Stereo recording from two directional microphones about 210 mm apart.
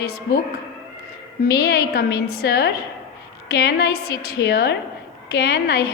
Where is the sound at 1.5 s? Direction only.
50° left (ahead or behind).